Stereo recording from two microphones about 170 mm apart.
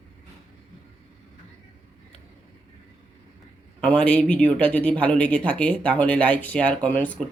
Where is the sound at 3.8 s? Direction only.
5° left (ahead or behind).